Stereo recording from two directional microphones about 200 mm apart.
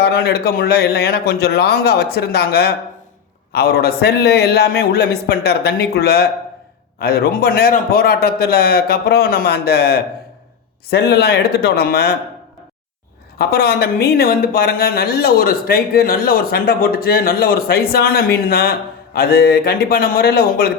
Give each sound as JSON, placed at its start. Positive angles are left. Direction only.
{"t": 0.0, "sound": "speech", "side_deg": 50}
{"t": 13.4, "sound": "speech", "side_deg": 50}